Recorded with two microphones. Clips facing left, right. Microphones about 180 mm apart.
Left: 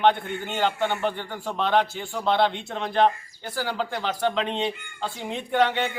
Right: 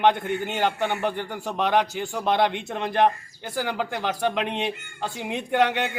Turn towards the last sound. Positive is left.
turn(degrees=-15)  # may be behind; listen again after turning